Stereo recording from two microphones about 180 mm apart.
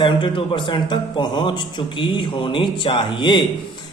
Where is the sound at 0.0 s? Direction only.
25° left (ahead or behind).